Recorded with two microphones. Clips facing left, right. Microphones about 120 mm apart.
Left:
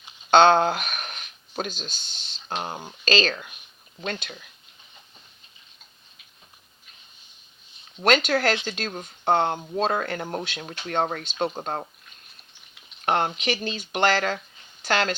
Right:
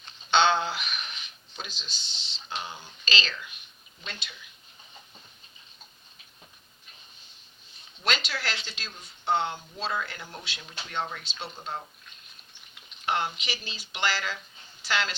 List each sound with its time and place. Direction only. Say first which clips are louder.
0.3 s speech: left 7 dB; 50° left (ahead or behind)
8.0 s speech: left 11 dB; 50° left (ahead or behind)
13.1 s speech: left 6 dB; 50° left (ahead or behind)